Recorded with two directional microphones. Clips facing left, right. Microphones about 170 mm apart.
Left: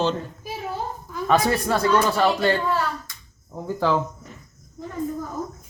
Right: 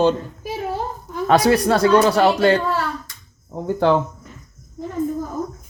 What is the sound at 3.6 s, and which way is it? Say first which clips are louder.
Speech: right 5 dB; 60° right (ahead or behind).